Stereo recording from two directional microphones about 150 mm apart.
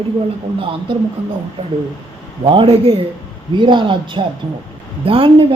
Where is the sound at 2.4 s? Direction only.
35° right (ahead or behind).